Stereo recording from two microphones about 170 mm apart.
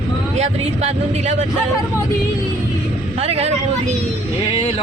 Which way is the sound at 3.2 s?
35° right (ahead or behind).